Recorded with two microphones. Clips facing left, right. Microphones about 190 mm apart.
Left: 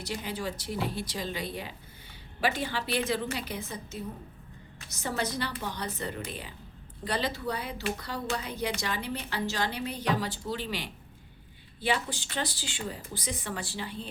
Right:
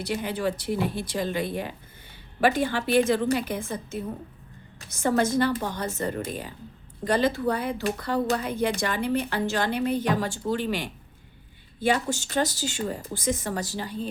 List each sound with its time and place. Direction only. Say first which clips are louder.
0.0 s speech: right 7 dB; 60° right (ahead or behind); by 14.1 s 40° right (ahead or behind)